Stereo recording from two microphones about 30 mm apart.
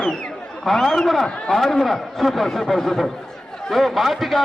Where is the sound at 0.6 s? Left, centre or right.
Centre.